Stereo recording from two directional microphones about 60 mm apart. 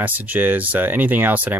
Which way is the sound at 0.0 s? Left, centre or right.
Right.